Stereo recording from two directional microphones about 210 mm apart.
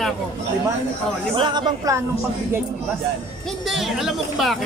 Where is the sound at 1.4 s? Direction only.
20° right (ahead or behind).